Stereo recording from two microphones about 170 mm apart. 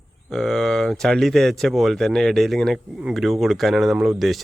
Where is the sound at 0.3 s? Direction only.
Centre (ahead or behind).